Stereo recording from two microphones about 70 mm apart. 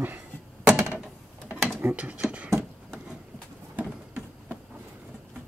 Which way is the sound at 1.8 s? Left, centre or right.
Centre.